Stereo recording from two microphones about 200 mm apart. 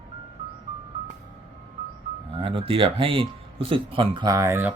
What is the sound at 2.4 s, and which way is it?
Speech, 25° right (ahead or behind).